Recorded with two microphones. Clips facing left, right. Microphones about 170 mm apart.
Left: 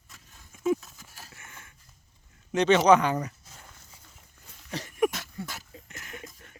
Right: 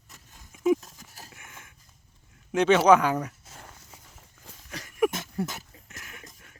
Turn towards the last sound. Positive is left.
turn(degrees=-5)  # may be behind; listen again after turning